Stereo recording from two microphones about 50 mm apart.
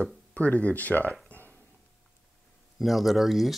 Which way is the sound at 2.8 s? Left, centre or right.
Centre.